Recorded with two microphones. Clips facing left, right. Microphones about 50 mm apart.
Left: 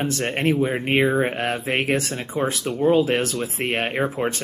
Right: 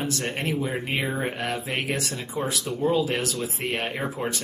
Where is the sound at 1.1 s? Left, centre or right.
Left.